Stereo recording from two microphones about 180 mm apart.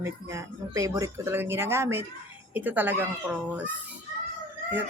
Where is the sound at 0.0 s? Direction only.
15° right (ahead or behind).